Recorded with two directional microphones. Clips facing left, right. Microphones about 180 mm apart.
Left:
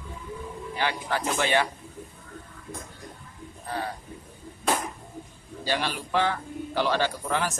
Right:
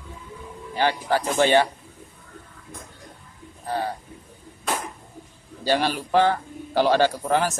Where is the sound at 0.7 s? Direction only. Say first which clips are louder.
Right 6 dB; 35° right (ahead or behind).